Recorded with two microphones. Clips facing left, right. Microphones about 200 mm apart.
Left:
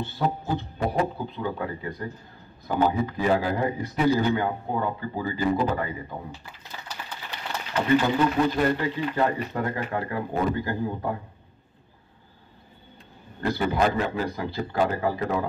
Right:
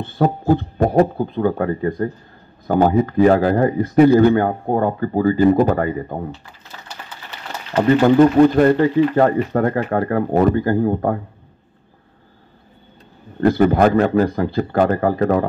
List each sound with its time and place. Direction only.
0.0 s speech: 50° right (ahead or behind)
7.7 s speech: 50° right (ahead or behind)
13.4 s speech: 55° right (ahead or behind)